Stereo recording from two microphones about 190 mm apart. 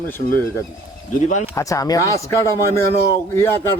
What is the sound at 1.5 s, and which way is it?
Speech, 15° left (ahead or behind).